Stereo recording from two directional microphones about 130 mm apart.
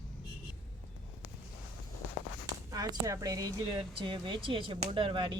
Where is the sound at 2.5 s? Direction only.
30° right (ahead or behind).